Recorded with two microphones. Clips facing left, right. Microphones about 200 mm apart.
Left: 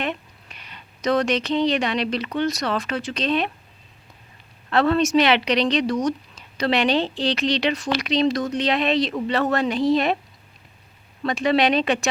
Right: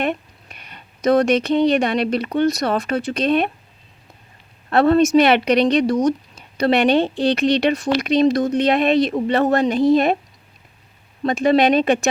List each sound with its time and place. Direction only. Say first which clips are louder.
0.0 s speech: right 5 dB; 50° right (ahead or behind)
4.7 s a woman's voice: right 5 dB; 50° right (ahead or behind)
5.9 s speech: right 5 dB; 25° right (ahead or behind)
6.7 s a woman's voice: right 5 dB; 55° right (ahead or behind)
11.2 s a woman's voice: right 4 dB; 45° right (ahead or behind)